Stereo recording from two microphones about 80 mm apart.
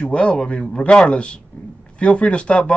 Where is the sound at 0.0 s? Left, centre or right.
Centre.